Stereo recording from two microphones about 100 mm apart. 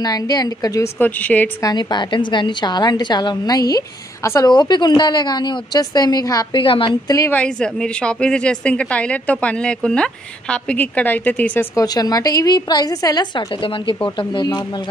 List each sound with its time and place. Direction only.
0.0 s a woman's voice: 40° left (ahead or behind)
0.9 s a woman's voice: 15° left (ahead or behind)
1.6 s a woman's voice: 45° left (ahead or behind)
6.5 s a woman's voice: 60° left (ahead or behind)
7.2 s a woman's voice: 10° left (ahead or behind)
11.7 s a woman's voice: 40° left (ahead or behind)